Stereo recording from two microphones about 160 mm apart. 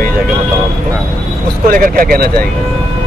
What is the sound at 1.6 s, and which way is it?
Speech, 60° right (ahead or behind).